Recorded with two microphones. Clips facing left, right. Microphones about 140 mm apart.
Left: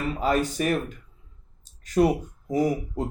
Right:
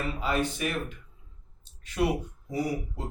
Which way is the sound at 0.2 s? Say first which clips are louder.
Left 6 dB; 40° left (ahead or behind).